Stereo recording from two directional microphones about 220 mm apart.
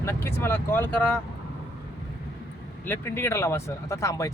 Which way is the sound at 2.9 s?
10° left (ahead or behind).